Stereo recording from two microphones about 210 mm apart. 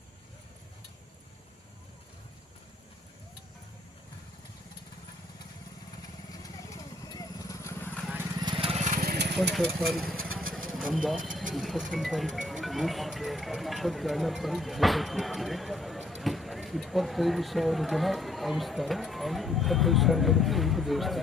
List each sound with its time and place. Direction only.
6.4 s vehicle: 15° left (ahead or behind)
8.0 s vehicle: 10° right (ahead or behind)
8.4 s vehicle: 20° right (ahead or behind); by 9.3 s 50° right (ahead or behind)
9.3 s speech: centre (ahead or behind)